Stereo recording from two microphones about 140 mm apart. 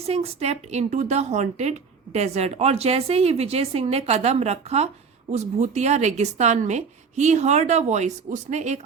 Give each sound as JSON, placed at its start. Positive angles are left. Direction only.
{"t": 0.1, "sound": "a woman's voice", "side_deg": -50}